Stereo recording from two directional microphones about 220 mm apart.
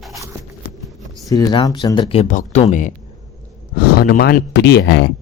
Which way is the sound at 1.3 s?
15° left (ahead or behind).